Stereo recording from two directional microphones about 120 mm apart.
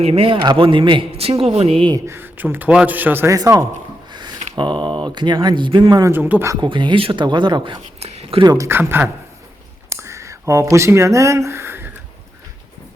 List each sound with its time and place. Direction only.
0.0 s speech: 50° right (ahead or behind)
2.0 s a man's voice: 20° right (ahead or behind)
3.3 s speech: 30° right (ahead or behind)
6.1 s a man's voice: 15° right (ahead or behind)
6.6 s speech: 40° right (ahead or behind)
7.9 s a sound: 60° right (ahead or behind)
8.4 s speech: 25° right (ahead or behind)